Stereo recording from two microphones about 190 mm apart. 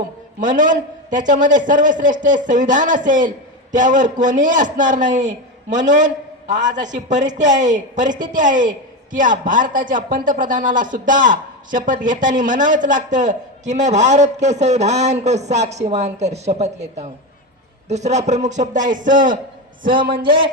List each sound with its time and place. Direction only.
0.3 s a man's voice: 45° right (ahead or behind)